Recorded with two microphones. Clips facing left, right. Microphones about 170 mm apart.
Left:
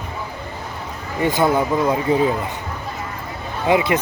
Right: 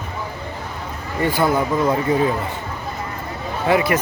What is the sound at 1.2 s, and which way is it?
Speech, 20° left (ahead or behind).